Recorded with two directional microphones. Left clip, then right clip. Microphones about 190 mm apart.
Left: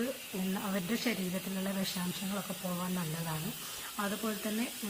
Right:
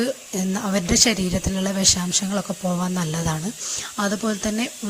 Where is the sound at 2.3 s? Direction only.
35° right (ahead or behind).